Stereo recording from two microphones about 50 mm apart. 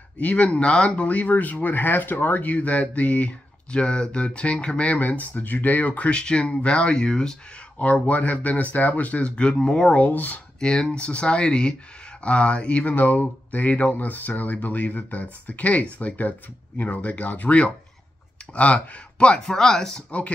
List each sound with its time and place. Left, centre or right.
0.2 s speech: left
8.1 s speech: left
9.3 s speech: left
10.0 s speech: left
10.6 s speech: centre
20.1 s speech: left